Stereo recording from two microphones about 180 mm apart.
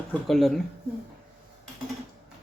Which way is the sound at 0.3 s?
Centre (ahead or behind).